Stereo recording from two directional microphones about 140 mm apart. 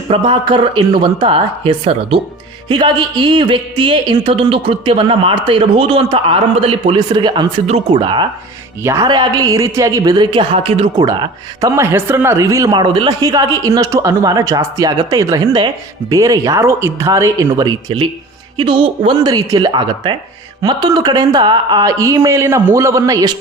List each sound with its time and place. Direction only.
0.1 s speech: 35° right (ahead or behind)
8.8 s speech: 20° right (ahead or behind); by 11.0 s 40° right (ahead or behind)
11.0 s speech: 30° right (ahead or behind)
11.7 s speech: 20° right (ahead or behind)